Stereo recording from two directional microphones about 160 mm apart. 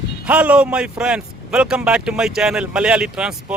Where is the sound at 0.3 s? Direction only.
10° right (ahead or behind).